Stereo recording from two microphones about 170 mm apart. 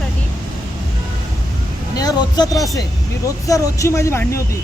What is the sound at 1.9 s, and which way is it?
Speech, 25° left (ahead or behind).